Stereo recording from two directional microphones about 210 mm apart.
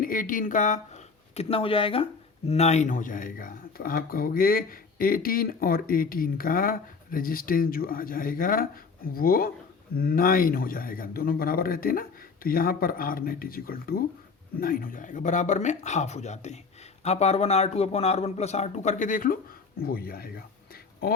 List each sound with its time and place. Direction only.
0.0 s speech: 40° left (ahead or behind)
1.4 s speech: 25° left (ahead or behind); by 20.4 s 45° left (ahead or behind)